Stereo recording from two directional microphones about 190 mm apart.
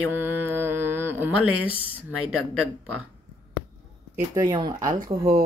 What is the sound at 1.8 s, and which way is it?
Speech, 5° right (ahead or behind).